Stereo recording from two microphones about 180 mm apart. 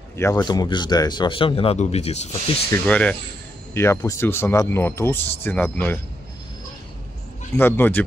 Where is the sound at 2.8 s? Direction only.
5° left (ahead or behind).